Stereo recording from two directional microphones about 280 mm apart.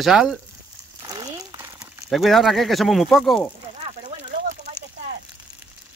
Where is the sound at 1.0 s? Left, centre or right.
Centre.